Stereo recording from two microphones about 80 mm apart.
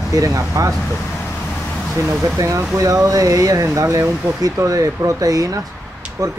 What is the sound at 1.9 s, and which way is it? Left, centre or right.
Speech, right.